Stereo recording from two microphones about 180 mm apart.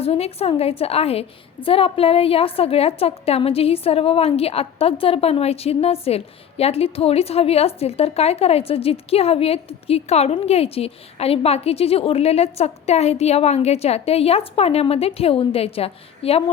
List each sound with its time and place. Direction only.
0.0 s a woman's voice: 35° left (ahead or behind)